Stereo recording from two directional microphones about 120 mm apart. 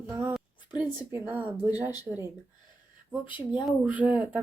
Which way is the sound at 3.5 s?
10° right (ahead or behind).